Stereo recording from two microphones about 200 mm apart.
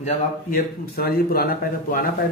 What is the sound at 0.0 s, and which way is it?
Speech, 45° left (ahead or behind).